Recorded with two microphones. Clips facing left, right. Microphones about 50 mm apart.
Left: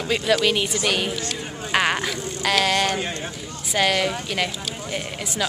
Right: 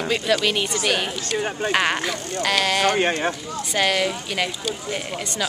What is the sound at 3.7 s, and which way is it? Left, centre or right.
Speech, centre.